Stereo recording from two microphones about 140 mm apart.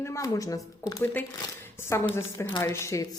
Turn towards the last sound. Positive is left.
turn(degrees=20)  # may be behind; listen again after turning